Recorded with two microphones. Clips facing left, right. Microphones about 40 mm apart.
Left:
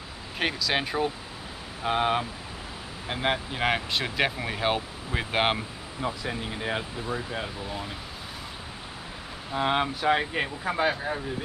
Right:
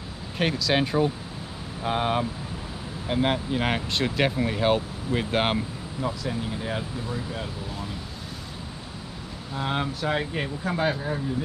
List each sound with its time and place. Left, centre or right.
0.4 s speech: centre
6.0 s speech: left
9.5 s speech: left